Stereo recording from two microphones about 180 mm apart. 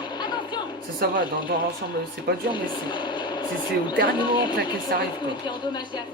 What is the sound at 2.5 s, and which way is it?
Speech, 25° left (ahead or behind).